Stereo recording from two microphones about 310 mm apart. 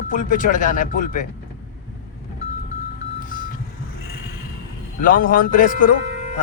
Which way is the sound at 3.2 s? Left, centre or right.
Left.